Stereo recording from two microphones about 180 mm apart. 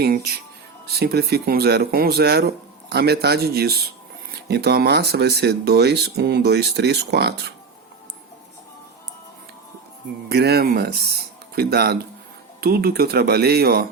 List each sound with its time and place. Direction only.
0.0 s speech: 60° right (ahead or behind)
10.2 s speech: 65° right (ahead or behind)